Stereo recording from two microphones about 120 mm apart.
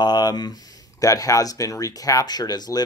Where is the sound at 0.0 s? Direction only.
35° left (ahead or behind).